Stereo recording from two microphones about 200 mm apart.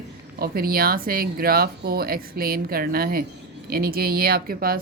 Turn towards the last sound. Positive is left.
turn(degrees=-45)  # may be behind; listen again after turning